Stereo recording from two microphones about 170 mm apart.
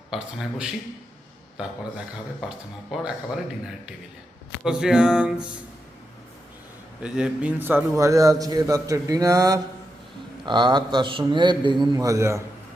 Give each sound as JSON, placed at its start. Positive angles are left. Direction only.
{"t": 0.1, "sound": "music", "side_deg": 0}
{"t": 2.9, "sound": "music", "side_deg": -5}
{"t": 4.6, "sound": "music", "side_deg": -5}
{"t": 7.0, "sound": "a man's voice", "side_deg": -5}